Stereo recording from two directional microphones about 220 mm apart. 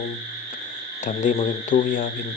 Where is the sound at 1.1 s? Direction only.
35° left (ahead or behind).